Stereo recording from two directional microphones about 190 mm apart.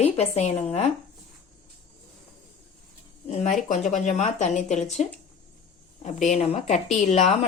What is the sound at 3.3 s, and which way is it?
A woman's voice, 40° left (ahead or behind).